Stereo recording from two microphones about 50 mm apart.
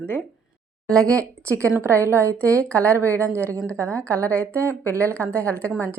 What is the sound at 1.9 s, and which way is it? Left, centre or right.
A woman's voice, right.